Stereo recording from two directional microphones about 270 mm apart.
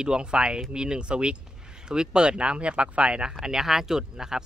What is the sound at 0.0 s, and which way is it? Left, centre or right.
Speech, centre.